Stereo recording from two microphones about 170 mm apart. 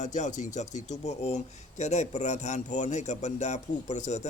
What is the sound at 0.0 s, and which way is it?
A man's voice, 45° left (ahead or behind).